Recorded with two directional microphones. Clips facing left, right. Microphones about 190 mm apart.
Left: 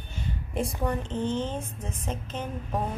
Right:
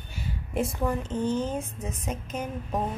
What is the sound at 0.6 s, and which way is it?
A woman's voice, 5° right (ahead or behind).